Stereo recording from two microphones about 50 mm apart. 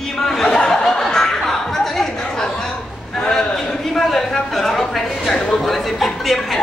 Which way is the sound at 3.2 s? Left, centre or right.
Centre.